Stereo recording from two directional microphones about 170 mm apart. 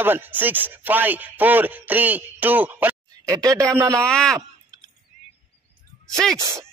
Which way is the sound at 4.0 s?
5° left (ahead or behind).